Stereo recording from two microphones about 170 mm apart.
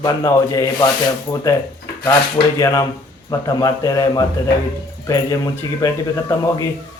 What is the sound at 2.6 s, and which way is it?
Speech, 20° left (ahead or behind).